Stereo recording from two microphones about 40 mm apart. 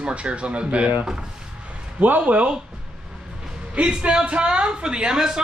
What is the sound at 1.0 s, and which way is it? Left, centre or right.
Speech, centre.